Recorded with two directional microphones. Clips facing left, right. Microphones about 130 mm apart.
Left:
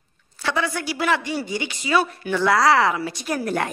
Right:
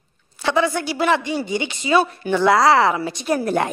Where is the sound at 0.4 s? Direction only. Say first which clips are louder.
Right 5 dB; 25° right (ahead or behind).